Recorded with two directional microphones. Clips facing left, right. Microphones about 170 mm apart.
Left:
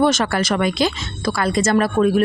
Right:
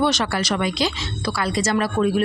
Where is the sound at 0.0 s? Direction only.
50° left (ahead or behind).